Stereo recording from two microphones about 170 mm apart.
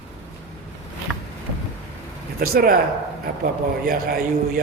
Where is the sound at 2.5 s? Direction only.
60° right (ahead or behind).